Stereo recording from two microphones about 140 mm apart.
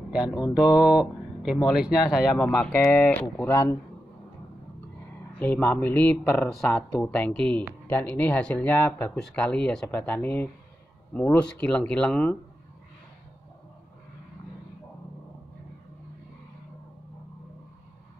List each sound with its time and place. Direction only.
0.1 s mantra: 5° right (ahead or behind)
0.7 s mantra: 30° left (ahead or behind)
1.8 s speech: 5° right (ahead or behind); by 3.7 s 20° left (ahead or behind)
5.4 s speech: 15° left (ahead or behind)